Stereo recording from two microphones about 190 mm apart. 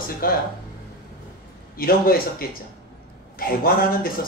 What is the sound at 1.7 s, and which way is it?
Speech, 50° left (ahead or behind).